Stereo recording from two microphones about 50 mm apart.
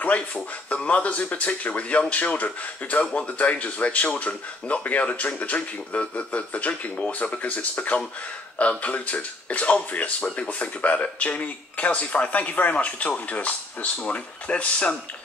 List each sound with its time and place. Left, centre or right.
0.0 s speech: left